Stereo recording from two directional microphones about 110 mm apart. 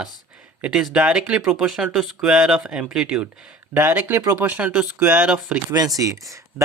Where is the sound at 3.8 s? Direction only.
20° right (ahead or behind).